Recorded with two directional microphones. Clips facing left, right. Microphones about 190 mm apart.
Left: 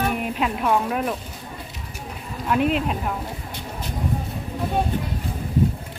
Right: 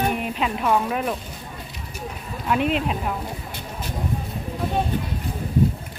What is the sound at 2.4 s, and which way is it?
Speech, centre (ahead or behind).